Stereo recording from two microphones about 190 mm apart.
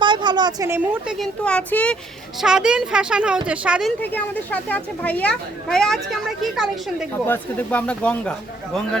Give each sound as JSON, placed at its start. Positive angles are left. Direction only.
{"t": 0.0, "sound": "a sound", "side_deg": -25}
{"t": 1.0, "sound": "speech", "side_deg": 5}
{"t": 4.0, "sound": "speech", "side_deg": 10}